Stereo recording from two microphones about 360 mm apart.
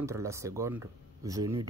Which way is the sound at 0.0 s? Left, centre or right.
Centre.